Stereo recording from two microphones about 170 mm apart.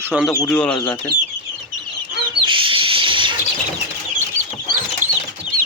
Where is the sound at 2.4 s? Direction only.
30° right (ahead or behind).